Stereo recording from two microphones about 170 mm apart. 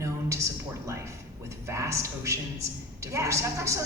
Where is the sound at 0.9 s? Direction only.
15° right (ahead or behind).